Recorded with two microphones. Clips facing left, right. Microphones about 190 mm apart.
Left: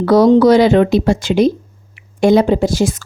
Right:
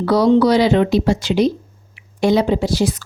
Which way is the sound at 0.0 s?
50° left (ahead or behind).